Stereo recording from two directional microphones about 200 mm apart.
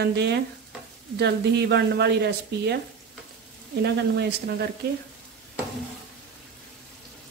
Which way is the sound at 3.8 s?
55° right (ahead or behind).